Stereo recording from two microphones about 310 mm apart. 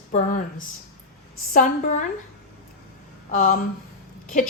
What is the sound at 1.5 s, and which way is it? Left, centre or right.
Speech, left.